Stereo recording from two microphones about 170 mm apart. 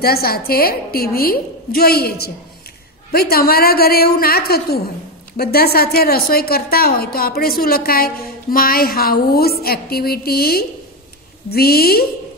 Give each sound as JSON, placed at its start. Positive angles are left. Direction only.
{"t": 0.0, "sound": "a woman's voice", "side_deg": 65}